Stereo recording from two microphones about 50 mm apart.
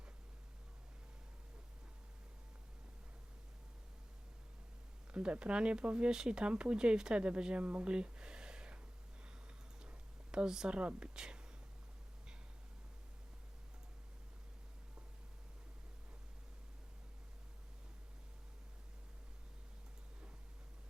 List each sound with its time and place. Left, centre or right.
5.1 s speech: centre
10.3 s speech: centre